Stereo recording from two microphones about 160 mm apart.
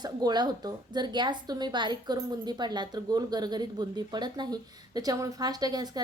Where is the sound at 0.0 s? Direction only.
25° right (ahead or behind).